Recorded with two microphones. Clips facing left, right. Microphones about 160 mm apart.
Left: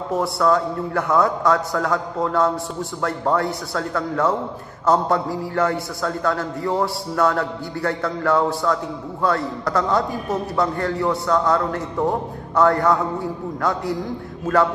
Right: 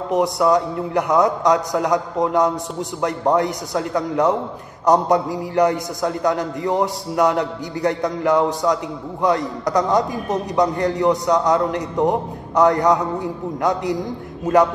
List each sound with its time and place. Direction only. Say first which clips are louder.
0.1 s a man's voice: right 2 dB; 20° right (ahead or behind)